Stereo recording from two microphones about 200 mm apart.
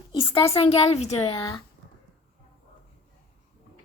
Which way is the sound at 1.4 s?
20° left (ahead or behind).